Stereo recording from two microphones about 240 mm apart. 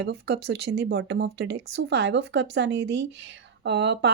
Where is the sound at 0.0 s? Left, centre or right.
Right.